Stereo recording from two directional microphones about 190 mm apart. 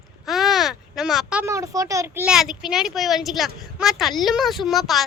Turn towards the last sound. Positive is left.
turn(degrees=0)  # may be behind; listen again after turning